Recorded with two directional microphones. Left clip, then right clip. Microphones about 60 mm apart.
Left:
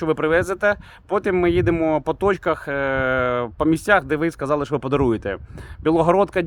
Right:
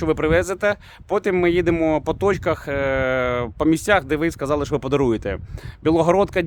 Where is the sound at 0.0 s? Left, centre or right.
Right.